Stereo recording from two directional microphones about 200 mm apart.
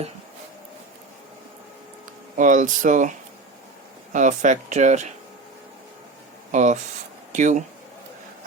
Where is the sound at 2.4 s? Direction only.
40° right (ahead or behind).